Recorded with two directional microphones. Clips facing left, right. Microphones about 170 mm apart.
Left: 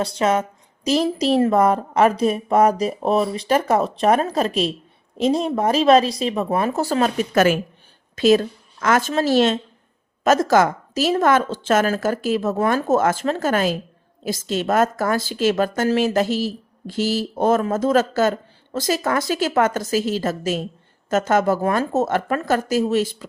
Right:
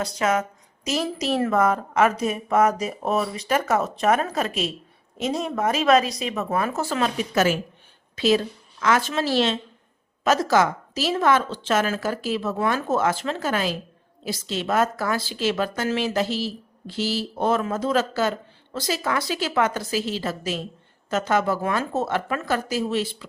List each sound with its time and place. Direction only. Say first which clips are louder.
0.0 s a woman's voice: left 3 dB; 30° left (ahead or behind); by 23.0 s 45° left (ahead or behind)